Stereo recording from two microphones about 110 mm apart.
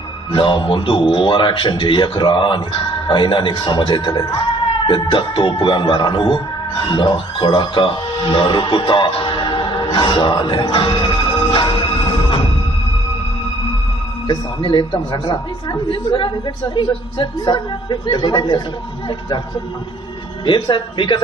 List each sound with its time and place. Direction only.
0.3 s a man's voice: 50° left (ahead or behind)
14.3 s a man's voice: 45° left (ahead or behind)
20.4 s a man's voice: 45° left (ahead or behind)